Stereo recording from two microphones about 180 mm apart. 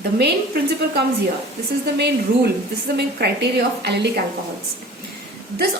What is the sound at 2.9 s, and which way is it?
A woman's voice, 65° right (ahead or behind).